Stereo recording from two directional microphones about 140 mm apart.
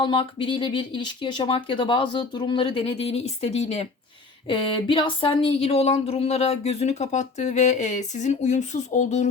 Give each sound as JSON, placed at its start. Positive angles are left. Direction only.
{"t": 0.0, "sound": "speech", "side_deg": 35}
{"t": 4.4, "sound": "speech", "side_deg": 35}